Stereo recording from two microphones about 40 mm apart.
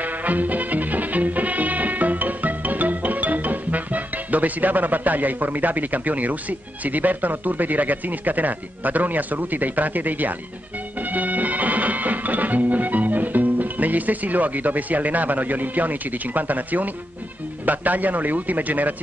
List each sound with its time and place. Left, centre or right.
0.0 s music: right
6.8 s speech: right
11.0 s music: right
17.6 s speech: right